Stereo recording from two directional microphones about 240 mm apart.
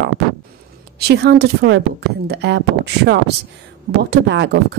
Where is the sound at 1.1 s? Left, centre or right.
Right.